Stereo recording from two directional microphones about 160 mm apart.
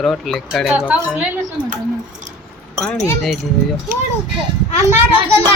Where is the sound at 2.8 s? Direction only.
5° left (ahead or behind).